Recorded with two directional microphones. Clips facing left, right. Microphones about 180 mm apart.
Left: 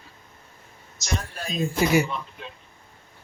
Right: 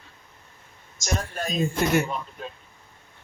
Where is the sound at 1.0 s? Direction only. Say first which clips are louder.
Right 3 dB; 45° right (ahead or behind).